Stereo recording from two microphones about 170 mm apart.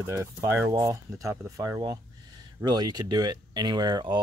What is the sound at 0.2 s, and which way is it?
Speech, 15° right (ahead or behind).